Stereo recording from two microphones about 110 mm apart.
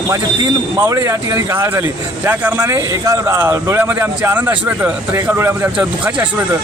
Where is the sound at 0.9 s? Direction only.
30° right (ahead or behind).